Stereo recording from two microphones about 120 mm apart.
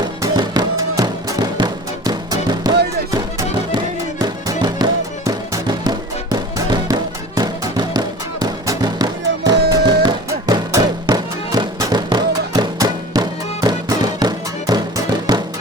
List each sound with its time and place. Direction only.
0.2 s music: 35° right (ahead or behind)